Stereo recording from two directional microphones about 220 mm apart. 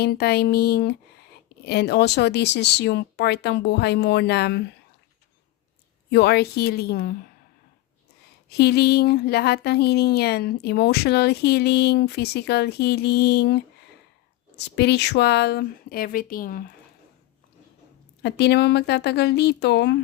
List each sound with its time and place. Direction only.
0.0 s speech: 45° left (ahead or behind)
6.1 s speech: 50° left (ahead or behind)
8.4 s speech: 45° left (ahead or behind)
14.6 s speech: 50° left (ahead or behind)
18.2 s speech: 50° left (ahead or behind)